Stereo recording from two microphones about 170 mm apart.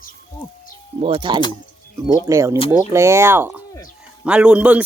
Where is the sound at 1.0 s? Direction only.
30° right (ahead or behind).